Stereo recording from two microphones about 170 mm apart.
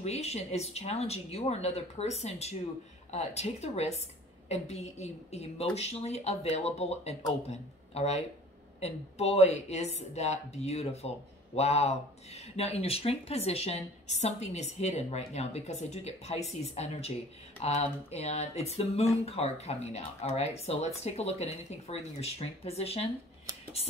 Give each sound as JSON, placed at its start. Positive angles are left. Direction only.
{"t": 0.0, "sound": "speech", "side_deg": 40}